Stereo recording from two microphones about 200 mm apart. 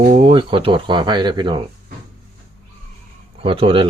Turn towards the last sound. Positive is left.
turn(degrees=-30)  # may be behind; listen again after turning